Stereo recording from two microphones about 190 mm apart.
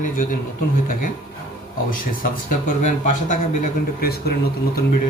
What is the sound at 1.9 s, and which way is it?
Speech, 45° left (ahead or behind).